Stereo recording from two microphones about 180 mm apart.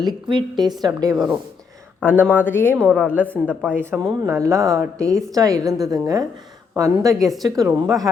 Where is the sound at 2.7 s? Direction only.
5° right (ahead or behind).